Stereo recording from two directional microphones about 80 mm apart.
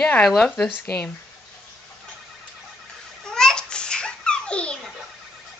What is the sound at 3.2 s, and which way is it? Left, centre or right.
Babbling, centre.